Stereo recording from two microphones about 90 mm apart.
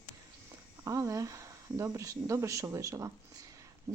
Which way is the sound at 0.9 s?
35° right (ahead or behind).